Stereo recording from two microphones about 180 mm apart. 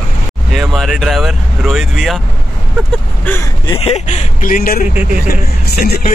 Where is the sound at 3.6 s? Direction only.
35° left (ahead or behind); by 4.8 s 50° left (ahead or behind).